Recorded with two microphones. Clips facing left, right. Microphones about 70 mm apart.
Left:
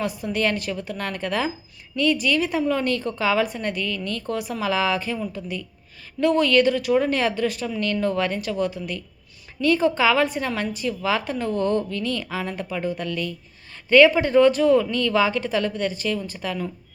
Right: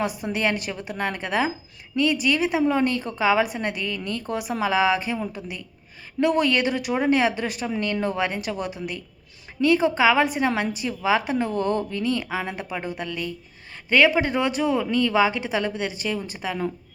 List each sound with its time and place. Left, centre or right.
0.0 s a woman's voice: centre